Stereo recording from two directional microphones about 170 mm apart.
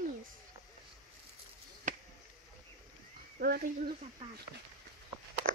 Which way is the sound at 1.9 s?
45° right (ahead or behind).